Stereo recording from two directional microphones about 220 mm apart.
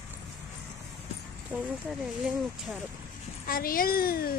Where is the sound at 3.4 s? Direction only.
40° left (ahead or behind).